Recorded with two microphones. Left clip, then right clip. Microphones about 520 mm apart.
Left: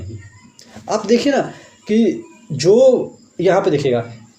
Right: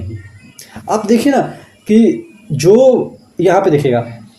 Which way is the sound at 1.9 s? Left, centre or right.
Right.